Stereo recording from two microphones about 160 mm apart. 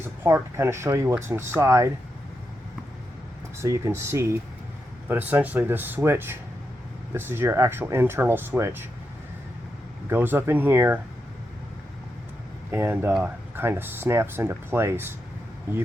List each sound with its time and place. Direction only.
0.2 s speech: 15° right (ahead or behind)
3.6 s speech: 20° right (ahead or behind)
10.1 s speech: 15° right (ahead or behind)
12.7 s speech: 15° right (ahead or behind)